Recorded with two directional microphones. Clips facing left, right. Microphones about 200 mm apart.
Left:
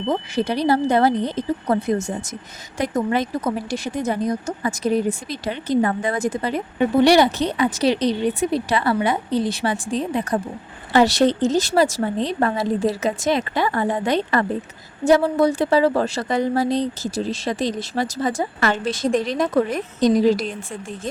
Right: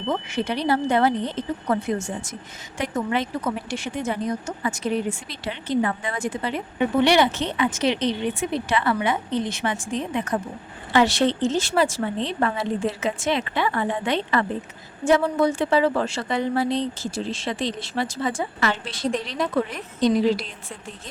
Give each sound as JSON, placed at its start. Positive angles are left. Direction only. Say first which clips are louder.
{"t": 0.1, "sound": "speech", "louder": "left 3 dB", "side_deg": 35}